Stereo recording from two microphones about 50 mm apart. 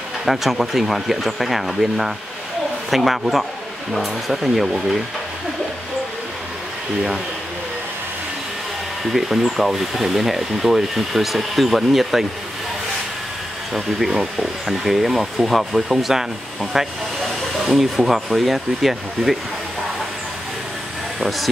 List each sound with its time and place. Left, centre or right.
0.2 s speech: centre
9.1 s speech: centre
13.7 s speech: centre
21.2 s speech: centre